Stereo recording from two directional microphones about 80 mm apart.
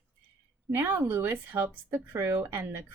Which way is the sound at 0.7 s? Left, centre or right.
Right.